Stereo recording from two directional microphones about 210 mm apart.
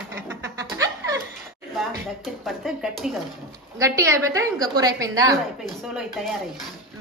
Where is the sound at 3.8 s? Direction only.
15° right (ahead or behind).